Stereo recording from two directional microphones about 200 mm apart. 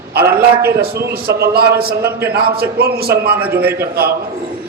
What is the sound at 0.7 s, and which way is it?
A man's voice, 50° right (ahead or behind).